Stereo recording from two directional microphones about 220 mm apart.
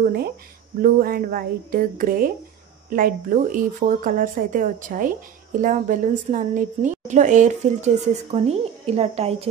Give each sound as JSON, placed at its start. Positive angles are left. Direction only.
{"t": 0.7, "sound": "a woman's voice", "side_deg": -40}